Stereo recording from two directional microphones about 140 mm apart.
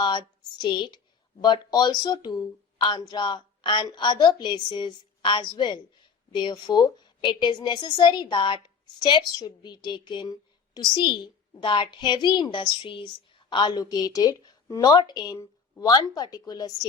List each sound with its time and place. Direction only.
0.0 s speech: 35° left (ahead or behind)